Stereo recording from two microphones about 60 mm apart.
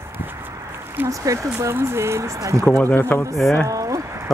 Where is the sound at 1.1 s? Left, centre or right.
Right.